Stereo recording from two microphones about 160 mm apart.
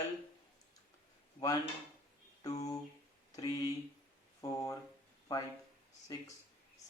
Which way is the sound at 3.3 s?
20° left (ahead or behind).